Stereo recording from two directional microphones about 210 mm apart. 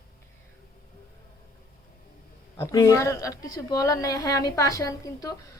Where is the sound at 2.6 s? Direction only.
15° left (ahead or behind).